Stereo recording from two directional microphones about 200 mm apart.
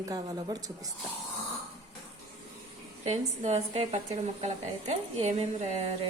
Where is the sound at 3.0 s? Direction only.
35° right (ahead or behind).